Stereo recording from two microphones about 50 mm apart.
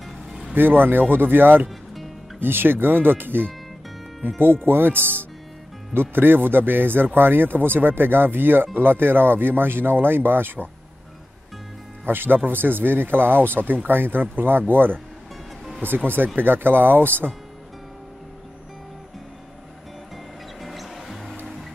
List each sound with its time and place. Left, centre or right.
0.0 s vehicle: centre
0.6 s speech: right
4.6 s speech: right
12.1 s speech: right
20.6 s music: centre